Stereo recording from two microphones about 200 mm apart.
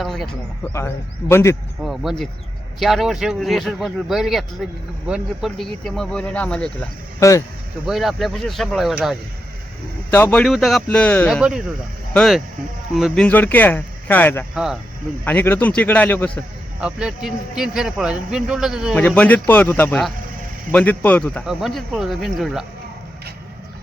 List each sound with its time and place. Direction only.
0.0 s speech: centre (ahead or behind)
1.3 s speech: 10° left (ahead or behind)
1.8 s speech: centre (ahead or behind); by 7.4 s 15° left (ahead or behind)
7.9 s speech: centre (ahead or behind)
10.1 s speech: 10° left (ahead or behind)
14.5 s speech: centre (ahead or behind)
15.2 s speech: 10° left (ahead or behind)
16.8 s speech: 5° right (ahead or behind)
18.9 s speech: 10° left (ahead or behind)